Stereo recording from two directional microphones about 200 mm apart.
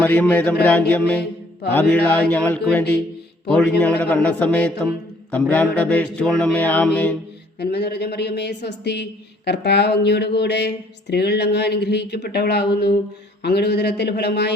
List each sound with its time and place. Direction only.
0.0 s a man's voice: 10° left (ahead or behind)
7.6 s speech: 55° left (ahead or behind)
12.7 s mantra: 55° left (ahead or behind)
13.4 s speech: 55° left (ahead or behind)